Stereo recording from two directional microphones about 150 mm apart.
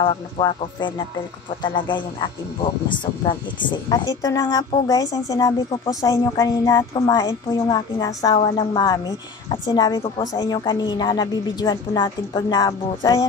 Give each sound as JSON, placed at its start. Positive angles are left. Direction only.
{"t": 0.0, "sound": "a woman's voice", "side_deg": 35}